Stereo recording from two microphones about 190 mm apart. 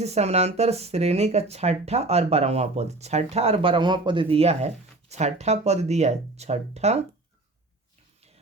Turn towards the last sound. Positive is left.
turn(degrees=-35)  # may be behind; listen again after turning